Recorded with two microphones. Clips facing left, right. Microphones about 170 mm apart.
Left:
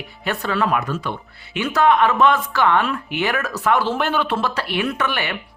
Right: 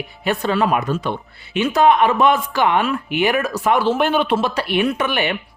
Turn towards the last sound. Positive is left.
turn(degrees=-20)  # may be behind; listen again after turning